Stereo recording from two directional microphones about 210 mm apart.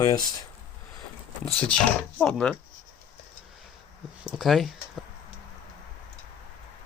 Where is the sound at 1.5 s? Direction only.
5° left (ahead or behind).